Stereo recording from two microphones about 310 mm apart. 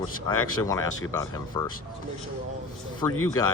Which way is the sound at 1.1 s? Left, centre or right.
Centre.